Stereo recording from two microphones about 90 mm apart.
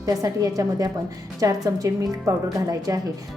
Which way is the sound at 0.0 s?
40° right (ahead or behind).